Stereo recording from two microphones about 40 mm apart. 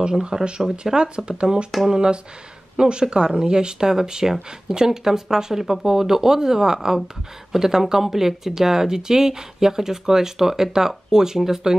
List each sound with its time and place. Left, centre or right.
0.2 s speech: centre
1.7 s speech: centre
2.8 s speech: right